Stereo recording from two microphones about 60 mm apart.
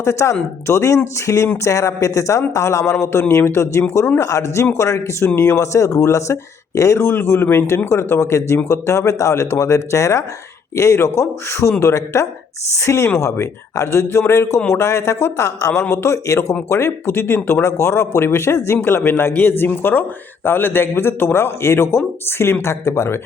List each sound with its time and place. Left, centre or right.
0.0 s speech: left
4.2 s speech: left
4.6 s speech: left
17.6 s speech: left
18.8 s speech: left